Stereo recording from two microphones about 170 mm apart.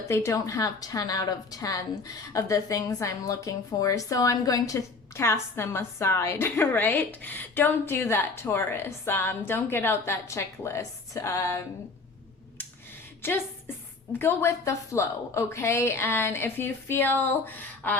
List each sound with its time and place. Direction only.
0.1 s a woman's voice: 15° left (ahead or behind)
13.2 s a woman's voice: 15° left (ahead or behind)